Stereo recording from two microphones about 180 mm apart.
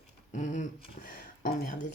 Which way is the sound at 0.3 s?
40° left (ahead or behind).